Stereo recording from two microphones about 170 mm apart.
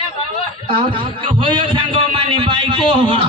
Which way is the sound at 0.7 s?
30° right (ahead or behind).